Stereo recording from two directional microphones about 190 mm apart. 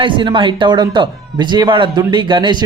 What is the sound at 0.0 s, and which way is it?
Speech, 25° right (ahead or behind).